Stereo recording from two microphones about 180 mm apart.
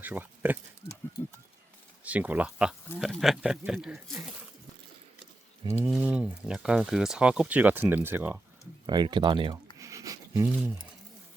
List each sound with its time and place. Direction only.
0.0 s speech: 10° right (ahead or behind)
2.0 s speech: 10° right (ahead or behind)
5.6 s speech: 15° right (ahead or behind)
8.9 s speech: 25° right (ahead or behind)
9.7 s a sound: 20° right (ahead or behind)